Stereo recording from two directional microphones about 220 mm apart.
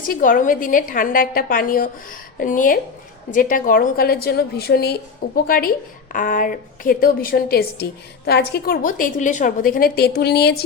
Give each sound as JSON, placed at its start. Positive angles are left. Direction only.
{"t": 0.0, "sound": "a woman's voice", "side_deg": 40}